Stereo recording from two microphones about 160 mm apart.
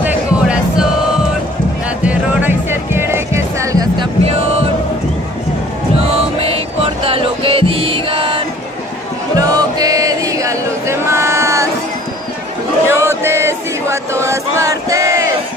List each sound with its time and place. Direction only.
0.0 s music: 10° right (ahead or behind)
2.0 s music: 15° right (ahead or behind)
6.0 s music: 35° right (ahead or behind)
9.4 s chant: 25° right (ahead or behind)
12.8 s chant: 15° right (ahead or behind)